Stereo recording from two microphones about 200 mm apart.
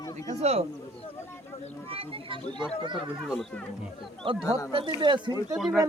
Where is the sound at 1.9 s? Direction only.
30° right (ahead or behind).